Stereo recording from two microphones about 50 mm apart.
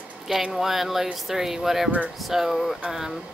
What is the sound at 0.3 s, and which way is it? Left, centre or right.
Speech, centre.